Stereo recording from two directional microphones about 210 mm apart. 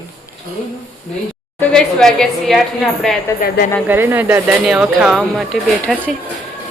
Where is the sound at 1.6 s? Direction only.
5° left (ahead or behind).